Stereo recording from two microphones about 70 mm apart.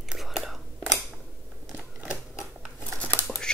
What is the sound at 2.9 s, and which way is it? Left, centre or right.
Crumpling, left.